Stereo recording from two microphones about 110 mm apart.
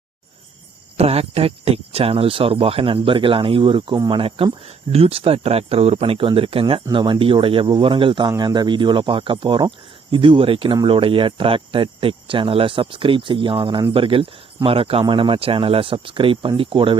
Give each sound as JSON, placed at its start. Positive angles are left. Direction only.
{"t": 0.9, "sound": "speech", "side_deg": -65}